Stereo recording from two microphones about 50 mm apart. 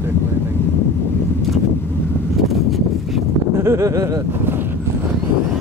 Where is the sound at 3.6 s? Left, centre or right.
Right.